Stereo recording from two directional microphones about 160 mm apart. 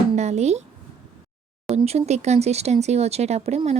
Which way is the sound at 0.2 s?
45° right (ahead or behind).